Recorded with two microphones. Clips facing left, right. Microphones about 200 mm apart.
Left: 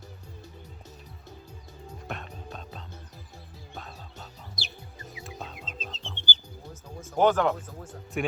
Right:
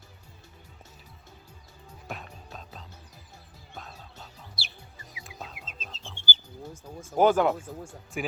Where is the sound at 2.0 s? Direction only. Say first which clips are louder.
Left 1 dB; centre (ahead or behind).